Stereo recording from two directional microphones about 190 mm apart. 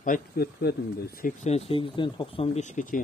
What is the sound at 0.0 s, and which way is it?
Speech, 50° left (ahead or behind).